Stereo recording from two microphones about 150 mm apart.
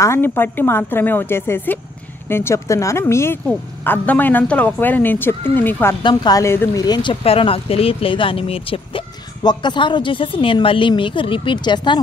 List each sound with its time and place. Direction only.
0.0 s speech: 15° left (ahead or behind)
6.0 s speech: 25° left (ahead or behind)